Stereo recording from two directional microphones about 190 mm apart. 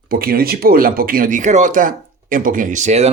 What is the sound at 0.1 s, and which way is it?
Speech, 50° right (ahead or behind).